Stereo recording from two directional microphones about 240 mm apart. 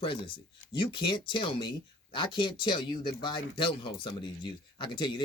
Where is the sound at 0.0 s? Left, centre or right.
Left.